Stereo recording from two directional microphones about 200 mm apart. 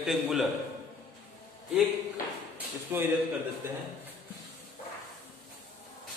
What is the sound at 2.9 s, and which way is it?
Speech, 10° right (ahead or behind).